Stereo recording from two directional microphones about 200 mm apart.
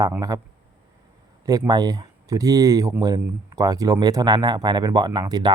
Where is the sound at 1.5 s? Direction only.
20° right (ahead or behind).